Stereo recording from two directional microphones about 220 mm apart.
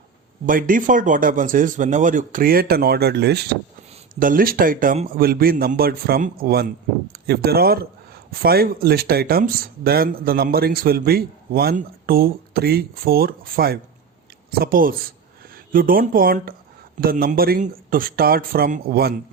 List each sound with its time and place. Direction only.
0.4 s a man's voice: 40° right (ahead or behind)
4.1 s a man's voice: 40° right (ahead or behind)